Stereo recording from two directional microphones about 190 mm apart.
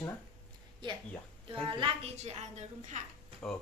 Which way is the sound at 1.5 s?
30° right (ahead or behind).